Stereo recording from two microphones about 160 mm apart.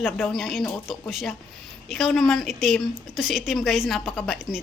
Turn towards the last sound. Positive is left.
turn(degrees=0)  # may be behind; listen again after turning